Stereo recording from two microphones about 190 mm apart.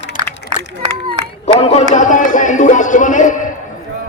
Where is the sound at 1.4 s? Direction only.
35° left (ahead or behind).